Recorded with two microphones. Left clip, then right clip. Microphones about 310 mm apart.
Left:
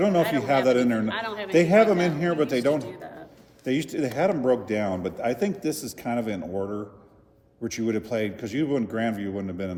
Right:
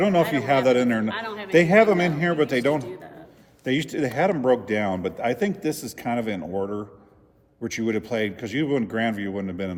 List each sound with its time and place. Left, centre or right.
0.0 s a man's voice: right
1.0 s a man's voice: centre
1.5 s a man's voice: right
2.8 s a sound: centre
3.6 s a man's voice: right